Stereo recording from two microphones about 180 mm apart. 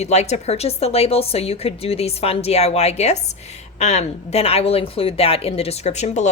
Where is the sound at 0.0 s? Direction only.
40° left (ahead or behind).